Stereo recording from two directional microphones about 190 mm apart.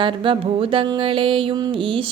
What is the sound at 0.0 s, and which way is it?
Mantra, 25° right (ahead or behind).